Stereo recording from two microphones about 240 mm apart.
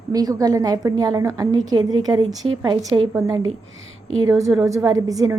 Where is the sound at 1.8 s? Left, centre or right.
Right.